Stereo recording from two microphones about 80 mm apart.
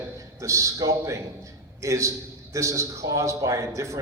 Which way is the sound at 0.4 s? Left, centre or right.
Right.